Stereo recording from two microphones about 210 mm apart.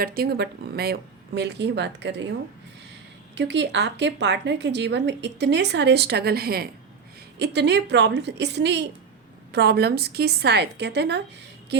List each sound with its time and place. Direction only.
0.0 s speech: 45° right (ahead or behind)
3.3 s a woman's voice: 55° right (ahead or behind)